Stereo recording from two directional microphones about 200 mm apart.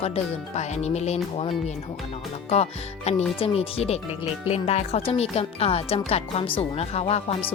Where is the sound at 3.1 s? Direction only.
30° left (ahead or behind).